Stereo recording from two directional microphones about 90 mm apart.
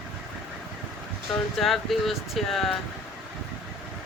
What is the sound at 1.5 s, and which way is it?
Speech, centre (ahead or behind).